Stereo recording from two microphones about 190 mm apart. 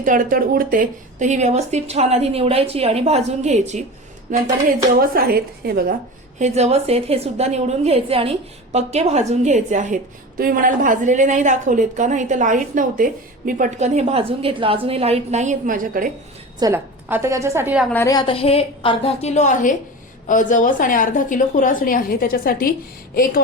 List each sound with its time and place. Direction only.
0.0 s a woman's voice: 45° right (ahead or behind)
4.9 s speech: 50° right (ahead or behind)
6.4 s a woman's voice: 35° right (ahead or behind)
16.6 s a woman's voice: 15° right (ahead or behind)
17.9 s a woman's voice: 20° left (ahead or behind); by 23.4 s 50° left (ahead or behind)